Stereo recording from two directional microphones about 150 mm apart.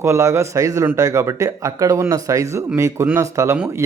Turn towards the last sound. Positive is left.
turn(degrees=-15)  # may be behind; listen again after turning